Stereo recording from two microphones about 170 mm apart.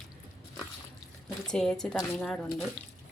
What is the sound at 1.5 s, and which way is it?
Speech, 5° left (ahead or behind).